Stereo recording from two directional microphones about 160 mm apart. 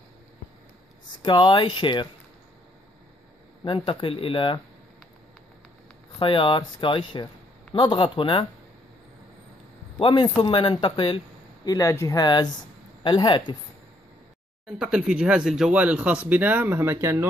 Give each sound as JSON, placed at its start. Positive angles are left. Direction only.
{"t": 1.2, "sound": "a man's voice", "side_deg": 30}
{"t": 3.6, "sound": "speech", "side_deg": 35}
{"t": 6.1, "sound": "speech", "side_deg": 30}
{"t": 9.9, "sound": "a man's voice", "side_deg": 30}
{"t": 14.7, "sound": "speech", "side_deg": -5}